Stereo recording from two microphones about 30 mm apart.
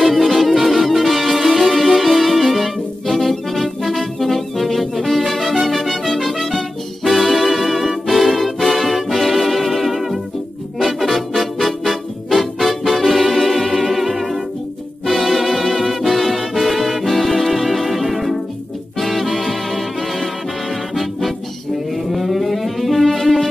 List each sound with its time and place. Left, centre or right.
0.0 s music: centre
21.9 s music: centre